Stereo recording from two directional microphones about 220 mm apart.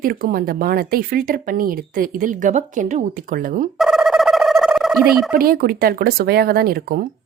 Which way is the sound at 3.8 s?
Centre (ahead or behind).